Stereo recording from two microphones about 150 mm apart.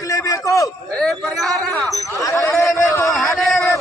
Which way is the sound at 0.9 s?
5° left (ahead or behind).